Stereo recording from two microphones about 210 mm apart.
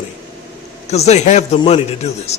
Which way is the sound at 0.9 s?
30° left (ahead or behind).